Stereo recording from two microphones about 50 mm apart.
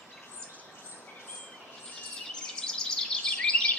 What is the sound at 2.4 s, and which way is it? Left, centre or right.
Chirp, centre.